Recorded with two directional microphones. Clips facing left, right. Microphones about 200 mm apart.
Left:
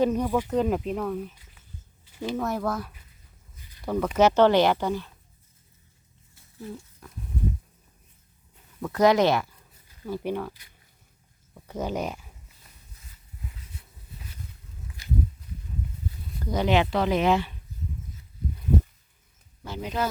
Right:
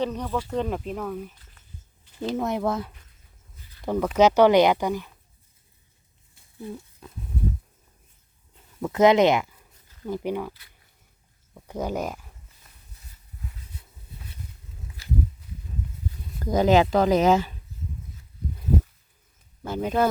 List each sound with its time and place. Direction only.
0.0 s speech: 10° left (ahead or behind)
0.5 s speech: 5° left (ahead or behind)
2.3 s speech: 20° right (ahead or behind)
3.8 s speech: 5° right (ahead or behind)
7.0 s a sound: 20° right (ahead or behind)
8.8 s speech: 20° right (ahead or behind)
11.5 s speech: 10° right (ahead or behind)
15.0 s walk: 15° left (ahead or behind)
16.4 s speech: 45° right (ahead or behind)
19.6 s speech: 50° right (ahead or behind)